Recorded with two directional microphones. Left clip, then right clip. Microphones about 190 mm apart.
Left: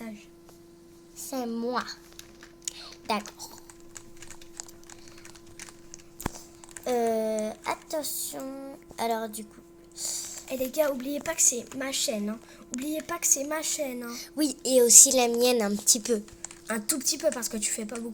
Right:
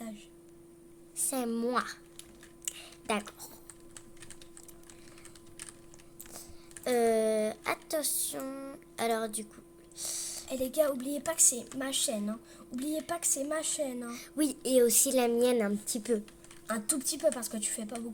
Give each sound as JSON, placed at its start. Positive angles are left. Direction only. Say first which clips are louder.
{"t": 1.3, "sound": "speech", "louder": "left 1 dB", "side_deg": -25}
{"t": 2.6, "sound": "a sound", "louder": "left 4 dB", "side_deg": -20}
{"t": 6.8, "sound": "speech", "louder": "left 1 dB", "side_deg": -20}
{"t": 10.0, "sound": "a sound", "louder": "left 4 dB", "side_deg": -20}
{"t": 10.5, "sound": "a woman's voice", "louder": "left 3 dB", "side_deg": 15}
{"t": 14.1, "sound": "a woman's voice", "louder": "left 3 dB", "side_deg": -20}
{"t": 16.6, "sound": "a woman's voice", "louder": "left 5 dB", "side_deg": 20}